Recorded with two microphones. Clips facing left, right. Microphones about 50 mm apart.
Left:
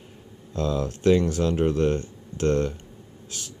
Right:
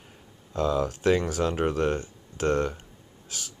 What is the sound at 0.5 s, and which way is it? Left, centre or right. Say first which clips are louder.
Speech: right 1 dB; right.